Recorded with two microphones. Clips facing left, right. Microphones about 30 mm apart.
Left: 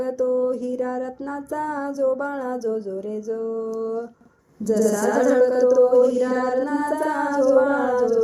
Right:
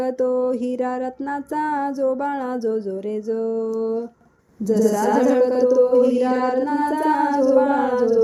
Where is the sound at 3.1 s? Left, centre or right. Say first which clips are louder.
Right 5 dB; right.